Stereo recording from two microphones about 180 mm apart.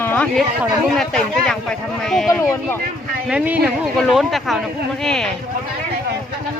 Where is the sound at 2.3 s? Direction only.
15° left (ahead or behind).